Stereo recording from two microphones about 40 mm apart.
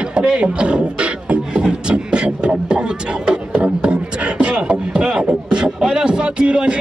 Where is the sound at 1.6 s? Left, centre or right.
Right.